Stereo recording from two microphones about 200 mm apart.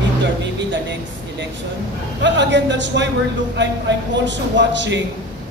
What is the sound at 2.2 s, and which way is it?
Speech, 60° right (ahead or behind).